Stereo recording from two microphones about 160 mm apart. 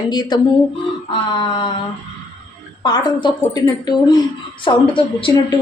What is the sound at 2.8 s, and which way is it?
A woman's voice, 25° left (ahead or behind).